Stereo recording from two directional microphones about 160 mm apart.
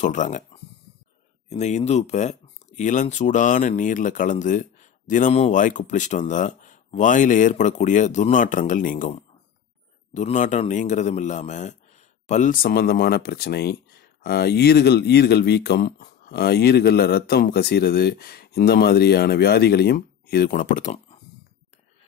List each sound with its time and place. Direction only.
0.0 s speech: 50° left (ahead or behind)
1.5 s speech: 45° left (ahead or behind)
10.1 s a man's voice: 50° left (ahead or behind)
12.6 s speech: 70° left (ahead or behind); by 21.2 s 45° left (ahead or behind)